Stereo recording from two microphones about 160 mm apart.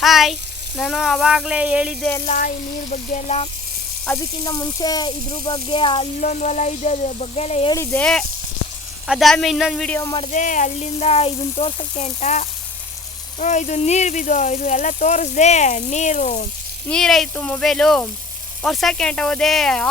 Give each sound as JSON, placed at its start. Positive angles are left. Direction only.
{"t": 0.0, "sound": "speech", "side_deg": 0}
{"t": 2.9, "sound": "speech", "side_deg": 40}
{"t": 4.2, "sound": "speech", "side_deg": 25}
{"t": 6.1, "sound": "speech", "side_deg": 45}
{"t": 7.7, "sound": "speech", "side_deg": 15}
{"t": 9.0, "sound": "speech", "side_deg": 0}
{"t": 10.0, "sound": "speech", "side_deg": 25}
{"t": 10.3, "sound": "speech", "side_deg": 55}
{"t": 16.9, "sound": "speech", "side_deg": 5}